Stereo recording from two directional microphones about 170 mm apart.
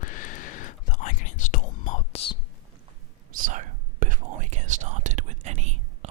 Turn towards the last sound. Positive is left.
turn(degrees=-40)  # may be behind; listen again after turning